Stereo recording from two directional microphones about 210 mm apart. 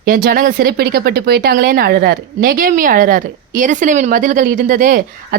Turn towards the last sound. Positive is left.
turn(degrees=-40)  # may be behind; listen again after turning